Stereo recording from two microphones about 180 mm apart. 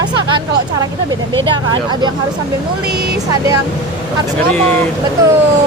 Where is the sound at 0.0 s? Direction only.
25° right (ahead or behind).